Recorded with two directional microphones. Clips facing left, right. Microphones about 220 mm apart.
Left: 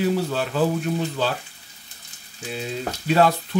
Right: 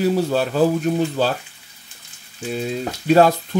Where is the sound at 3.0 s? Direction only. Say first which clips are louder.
Right 5 dB; 40° right (ahead or behind).